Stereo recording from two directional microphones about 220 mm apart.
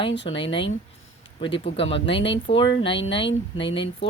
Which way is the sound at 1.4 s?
25° left (ahead or behind).